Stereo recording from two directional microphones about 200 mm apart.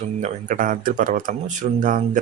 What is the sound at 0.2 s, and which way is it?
Speech, 40° right (ahead or behind).